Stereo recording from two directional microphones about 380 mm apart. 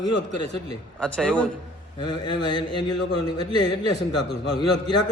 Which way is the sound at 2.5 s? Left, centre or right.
Centre.